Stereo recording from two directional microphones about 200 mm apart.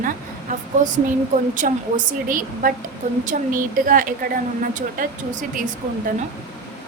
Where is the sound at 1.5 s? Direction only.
40° right (ahead or behind).